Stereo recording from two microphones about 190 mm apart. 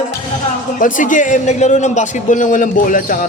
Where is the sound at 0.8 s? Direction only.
45° left (ahead or behind).